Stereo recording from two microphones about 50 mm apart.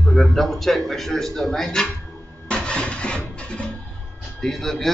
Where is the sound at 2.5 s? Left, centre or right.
Left.